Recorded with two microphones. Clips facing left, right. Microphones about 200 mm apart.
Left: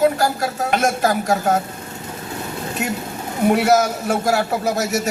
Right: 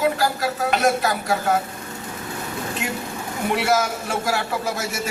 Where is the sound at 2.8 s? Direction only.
40° left (ahead or behind).